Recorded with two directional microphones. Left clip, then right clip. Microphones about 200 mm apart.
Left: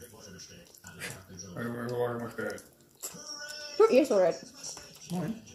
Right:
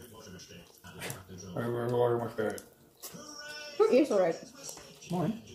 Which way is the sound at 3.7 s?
40° left (ahead or behind).